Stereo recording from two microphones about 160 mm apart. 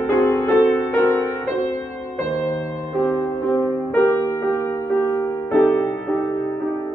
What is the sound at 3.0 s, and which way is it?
Music, 15° left (ahead or behind).